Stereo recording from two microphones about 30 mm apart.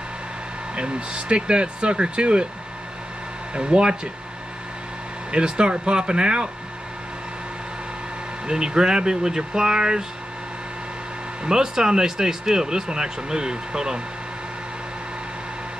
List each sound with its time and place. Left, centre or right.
0.7 s speech: right
3.5 s speech: right
5.3 s speech: right
8.5 s speech: right
11.4 s speech: right